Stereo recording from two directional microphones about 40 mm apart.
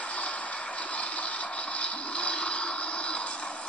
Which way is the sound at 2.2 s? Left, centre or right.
Left.